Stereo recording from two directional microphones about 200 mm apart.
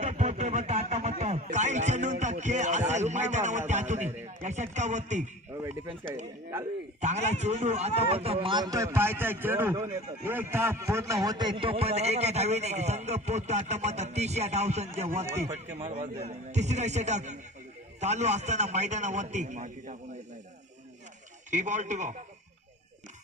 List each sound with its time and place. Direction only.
0.0 s a sound: 35° right (ahead or behind)
4.7 s a man's voice: 35° right (ahead or behind)
7.0 s a man's voice: 35° right (ahead or behind)
21.5 s a man's voice: 35° right (ahead or behind)